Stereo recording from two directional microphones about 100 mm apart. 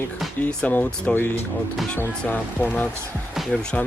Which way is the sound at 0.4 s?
20° left (ahead or behind).